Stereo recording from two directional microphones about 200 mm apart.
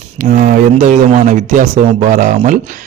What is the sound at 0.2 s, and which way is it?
Speech, 40° right (ahead or behind).